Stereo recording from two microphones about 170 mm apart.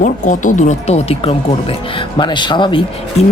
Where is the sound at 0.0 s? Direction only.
50° left (ahead or behind).